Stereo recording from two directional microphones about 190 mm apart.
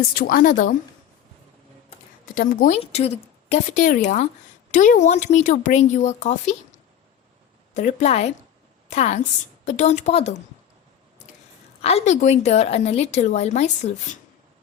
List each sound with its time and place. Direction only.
0.1 s a woman's voice: 50° left (ahead or behind)
2.2 s a woman's voice: 45° left (ahead or behind)
2.7 s a woman's voice: 35° left (ahead or behind)
7.7 s a woman's voice: 40° left (ahead or behind)
11.8 s a woman's voice: 35° left (ahead or behind)